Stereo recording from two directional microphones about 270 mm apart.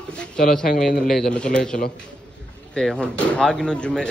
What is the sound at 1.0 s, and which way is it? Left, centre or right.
Speech, centre.